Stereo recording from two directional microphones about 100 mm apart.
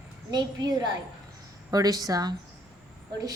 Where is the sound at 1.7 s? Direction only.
40° right (ahead or behind).